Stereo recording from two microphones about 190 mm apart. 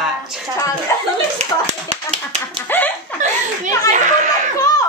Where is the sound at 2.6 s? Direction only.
10° left (ahead or behind).